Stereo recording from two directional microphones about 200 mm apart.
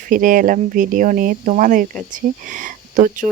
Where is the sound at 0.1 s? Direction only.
45° right (ahead or behind).